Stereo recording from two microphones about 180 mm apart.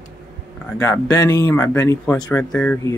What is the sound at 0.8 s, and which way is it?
Speech, 20° left (ahead or behind).